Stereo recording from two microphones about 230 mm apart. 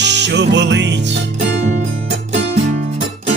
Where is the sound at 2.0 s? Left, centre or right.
Right.